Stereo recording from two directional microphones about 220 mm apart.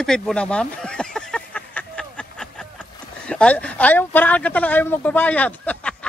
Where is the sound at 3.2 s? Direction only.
5° left (ahead or behind).